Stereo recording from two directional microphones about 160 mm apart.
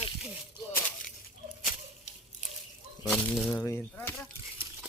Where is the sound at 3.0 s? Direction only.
5° left (ahead or behind).